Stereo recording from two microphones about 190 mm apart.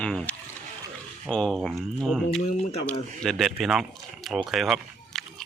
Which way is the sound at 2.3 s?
35° left (ahead or behind).